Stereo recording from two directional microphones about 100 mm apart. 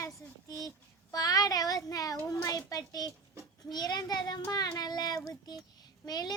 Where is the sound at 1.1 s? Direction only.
40° left (ahead or behind).